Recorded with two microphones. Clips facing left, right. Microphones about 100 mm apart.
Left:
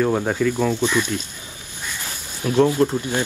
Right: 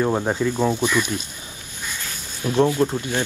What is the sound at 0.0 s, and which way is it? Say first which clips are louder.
Speech: left 1 dB; 20° right (ahead or behind).